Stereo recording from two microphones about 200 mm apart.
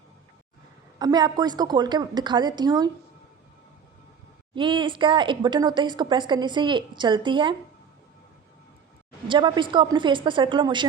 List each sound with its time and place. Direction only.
0.9 s a woman's voice: 20° right (ahead or behind)
4.5 s a woman's voice: 25° right (ahead or behind)
9.2 s a woman's voice: 25° right (ahead or behind)